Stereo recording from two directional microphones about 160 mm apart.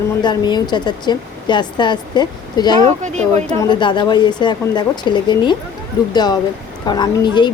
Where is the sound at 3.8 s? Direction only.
30° left (ahead or behind).